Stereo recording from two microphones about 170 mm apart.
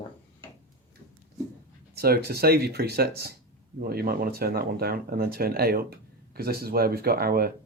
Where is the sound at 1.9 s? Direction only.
65° right (ahead or behind).